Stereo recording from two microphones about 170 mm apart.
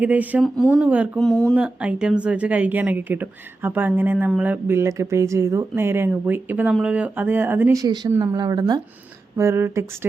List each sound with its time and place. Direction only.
0.0 s a woman's voice: 10° right (ahead or behind)
0.4 s speech: 5° left (ahead or behind)
0.8 s a woman's voice: 10° right (ahead or behind)
1.2 s speech: 5° left (ahead or behind)
1.5 s a woman's voice: 5° right (ahead or behind)